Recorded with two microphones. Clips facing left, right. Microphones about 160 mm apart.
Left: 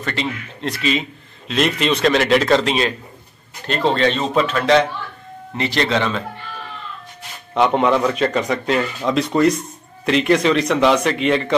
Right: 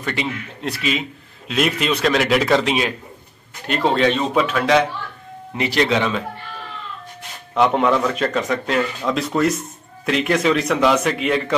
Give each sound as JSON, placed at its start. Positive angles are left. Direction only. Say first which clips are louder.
{"t": 0.0, "sound": "speech", "louder": "even", "side_deg": -10}
{"t": 7.5, "sound": "speech", "louder": "left 1 dB", "side_deg": 0}